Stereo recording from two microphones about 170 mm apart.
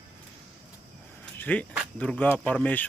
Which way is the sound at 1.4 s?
10° left (ahead or behind).